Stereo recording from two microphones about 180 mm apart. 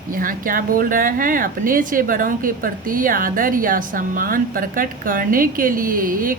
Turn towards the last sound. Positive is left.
turn(degrees=-50)  # may be behind; listen again after turning